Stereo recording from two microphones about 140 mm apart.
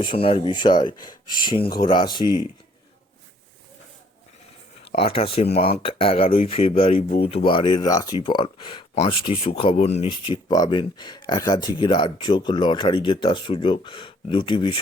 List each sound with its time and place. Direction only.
0.0 s speech: 40° left (ahead or behind)
4.9 s speech: 45° left (ahead or behind)
10.1 s speech: 35° left (ahead or behind)